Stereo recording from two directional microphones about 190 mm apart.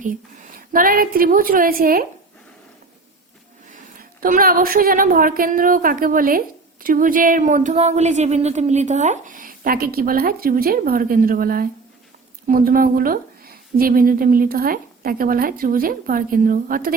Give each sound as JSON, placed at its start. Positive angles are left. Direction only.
{"t": 0.0, "sound": "speech", "side_deg": -45}
{"t": 4.2, "sound": "speech", "side_deg": -50}